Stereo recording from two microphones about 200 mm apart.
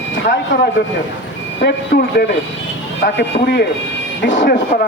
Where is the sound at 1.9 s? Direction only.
50° left (ahead or behind).